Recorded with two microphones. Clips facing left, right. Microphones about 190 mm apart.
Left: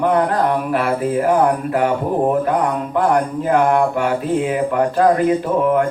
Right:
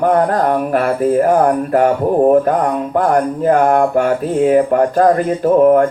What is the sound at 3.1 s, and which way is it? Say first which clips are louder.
Speech: right 4 dB; 45° right (ahead or behind).